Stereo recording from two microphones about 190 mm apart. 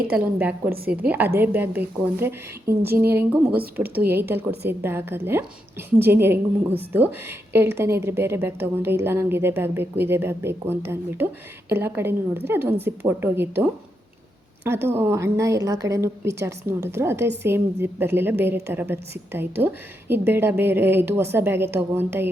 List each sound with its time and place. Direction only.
0.2 s a woman's voice: 10° right (ahead or behind)
3.8 s speech: 55° right (ahead or behind)
4.1 s a woman's voice: 10° right (ahead or behind)